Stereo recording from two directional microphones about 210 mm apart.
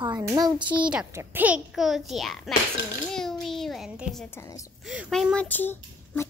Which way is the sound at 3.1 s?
Centre (ahead or behind).